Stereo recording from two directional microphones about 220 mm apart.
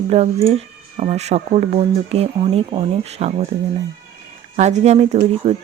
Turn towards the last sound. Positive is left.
turn(degrees=-30)  # may be behind; listen again after turning